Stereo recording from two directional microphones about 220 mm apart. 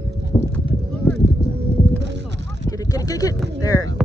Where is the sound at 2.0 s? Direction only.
55° right (ahead or behind).